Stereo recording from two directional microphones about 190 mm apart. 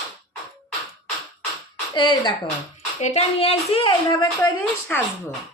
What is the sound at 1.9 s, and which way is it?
Speech, 25° left (ahead or behind).